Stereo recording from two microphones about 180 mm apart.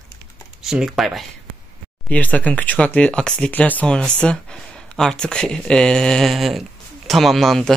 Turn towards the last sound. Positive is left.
turn(degrees=0)  # may be behind; listen again after turning